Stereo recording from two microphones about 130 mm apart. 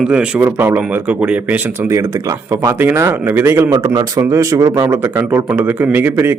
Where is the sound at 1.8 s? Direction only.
20° right (ahead or behind).